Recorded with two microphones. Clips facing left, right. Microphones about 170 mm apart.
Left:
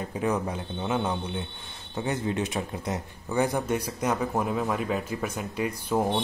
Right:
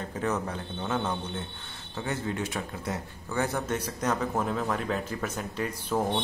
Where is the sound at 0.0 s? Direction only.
10° left (ahead or behind).